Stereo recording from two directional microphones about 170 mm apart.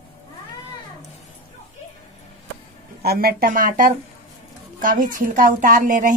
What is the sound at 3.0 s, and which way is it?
A woman's voice, 65° right (ahead or behind).